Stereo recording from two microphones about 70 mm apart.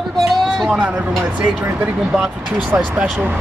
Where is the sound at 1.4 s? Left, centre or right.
Centre.